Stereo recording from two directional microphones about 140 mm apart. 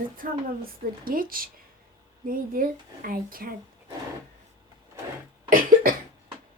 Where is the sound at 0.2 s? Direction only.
90° right.